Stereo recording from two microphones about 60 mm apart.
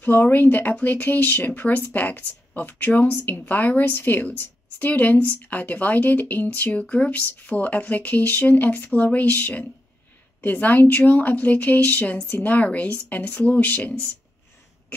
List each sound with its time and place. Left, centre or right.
0.0 s a woman's voice: left